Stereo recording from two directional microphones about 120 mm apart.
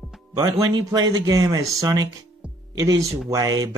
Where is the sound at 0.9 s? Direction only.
30° right (ahead or behind).